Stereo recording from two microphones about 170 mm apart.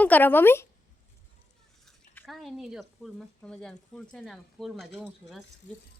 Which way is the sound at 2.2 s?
Centre (ahead or behind).